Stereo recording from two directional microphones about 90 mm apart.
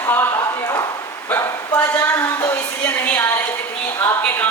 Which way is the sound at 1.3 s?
25° left (ahead or behind).